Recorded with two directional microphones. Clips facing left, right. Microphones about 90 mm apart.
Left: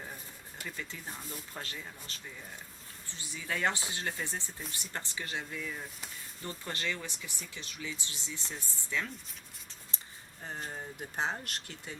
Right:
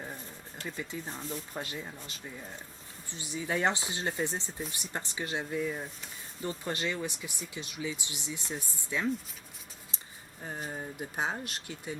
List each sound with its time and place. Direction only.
0.8 s speech: 20° right (ahead or behind)
10.4 s speech: 10° right (ahead or behind)